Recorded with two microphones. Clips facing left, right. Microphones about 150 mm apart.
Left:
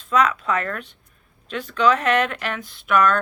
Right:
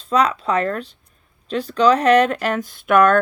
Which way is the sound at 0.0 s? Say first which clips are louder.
Right 2 dB; 35° right (ahead or behind).